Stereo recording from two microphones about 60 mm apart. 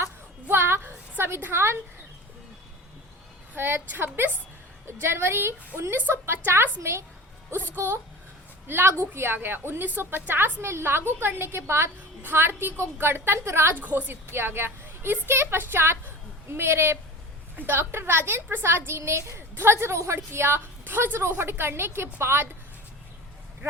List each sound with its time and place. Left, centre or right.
0.4 s a sound: right
3.5 s a woman's voice: right
8.6 s a woman's voice: right
13.7 s a woman's voice: right